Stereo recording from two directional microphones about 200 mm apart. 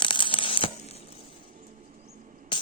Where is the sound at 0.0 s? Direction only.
25° left (ahead or behind).